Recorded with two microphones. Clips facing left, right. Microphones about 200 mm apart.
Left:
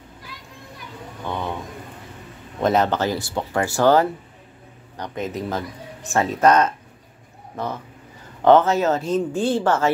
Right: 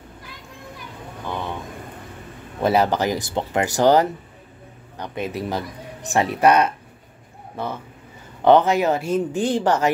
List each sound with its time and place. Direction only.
2.6 s speech: 10° right (ahead or behind)